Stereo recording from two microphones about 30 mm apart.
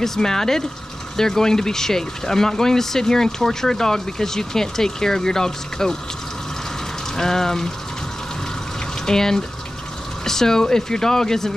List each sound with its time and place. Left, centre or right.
0.0 s speech: centre
7.2 s speech: centre
9.0 s speech: centre